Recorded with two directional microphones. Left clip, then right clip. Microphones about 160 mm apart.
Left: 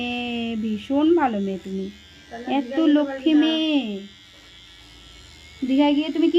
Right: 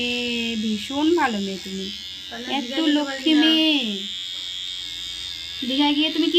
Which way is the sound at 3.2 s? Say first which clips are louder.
Right 5 dB; 65° left (ahead or behind).